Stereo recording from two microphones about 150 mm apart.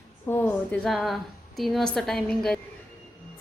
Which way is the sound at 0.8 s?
Centre (ahead or behind).